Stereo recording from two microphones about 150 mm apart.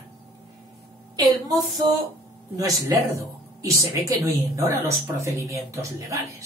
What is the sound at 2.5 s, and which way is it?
Speech, 20° right (ahead or behind).